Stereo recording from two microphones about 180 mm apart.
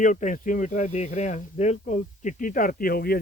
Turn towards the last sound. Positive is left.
turn(degrees=55)  # may be behind; listen again after turning